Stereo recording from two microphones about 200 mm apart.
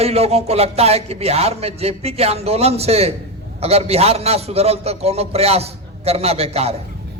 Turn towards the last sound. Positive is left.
turn(degrees=-30)  # may be behind; listen again after turning